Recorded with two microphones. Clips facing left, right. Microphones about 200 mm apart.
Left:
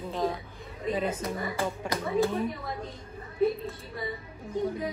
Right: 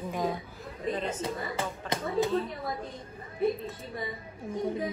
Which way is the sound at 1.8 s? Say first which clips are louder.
Left 1 dB; 15° left (ahead or behind).